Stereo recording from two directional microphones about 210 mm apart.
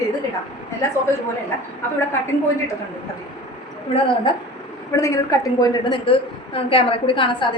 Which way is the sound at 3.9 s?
20° left (ahead or behind).